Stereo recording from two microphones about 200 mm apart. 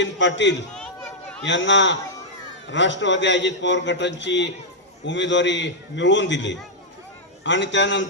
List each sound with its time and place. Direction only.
0.0 s a man's voice: 65° left (ahead or behind)
0.8 s chatter: 5° left (ahead or behind)
1.5 s a man's voice: 65° left (ahead or behind)